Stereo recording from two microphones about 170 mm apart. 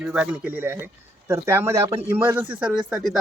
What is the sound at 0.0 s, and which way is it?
Speech, 5° right (ahead or behind).